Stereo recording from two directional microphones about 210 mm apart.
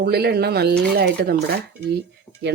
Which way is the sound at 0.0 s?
50° right (ahead or behind).